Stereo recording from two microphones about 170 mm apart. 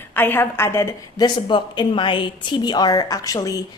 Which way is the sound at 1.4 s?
25° left (ahead or behind).